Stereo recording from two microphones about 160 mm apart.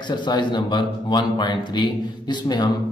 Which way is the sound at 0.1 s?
30° left (ahead or behind).